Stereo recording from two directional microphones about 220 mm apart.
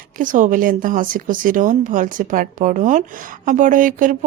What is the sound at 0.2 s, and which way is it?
Speech, 35° right (ahead or behind).